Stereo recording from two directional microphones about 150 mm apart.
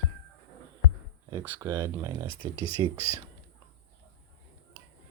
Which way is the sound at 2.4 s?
35° left (ahead or behind).